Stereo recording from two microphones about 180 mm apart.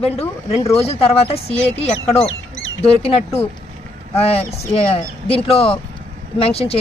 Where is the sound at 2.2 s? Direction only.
90° left.